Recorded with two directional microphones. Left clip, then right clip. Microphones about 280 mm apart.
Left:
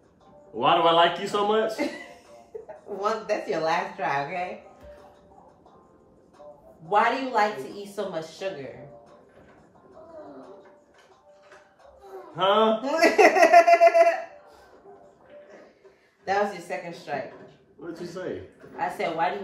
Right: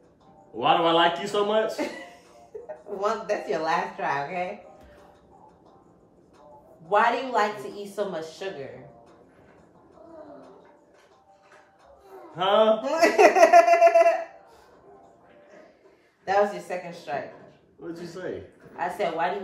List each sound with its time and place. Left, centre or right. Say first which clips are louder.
0.6 s a man's voice: left 1 dB; centre
3.0 s speech: even; centre
6.9 s a man's voice: right 1 dB; centre
12.4 s a man's voice: right 1 dB; centre
12.8 s speech: even; centre
16.3 s speech: right 2 dB; centre
17.7 s a man's voice: left 1 dB; centre
18.8 s speech: even; centre